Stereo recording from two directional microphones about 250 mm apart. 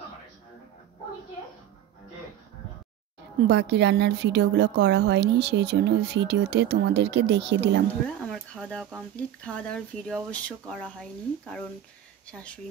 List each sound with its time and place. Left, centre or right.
3.4 s a woman's voice: right
8.5 s speech: centre